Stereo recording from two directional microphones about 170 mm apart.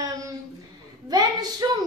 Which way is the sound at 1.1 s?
25° right (ahead or behind).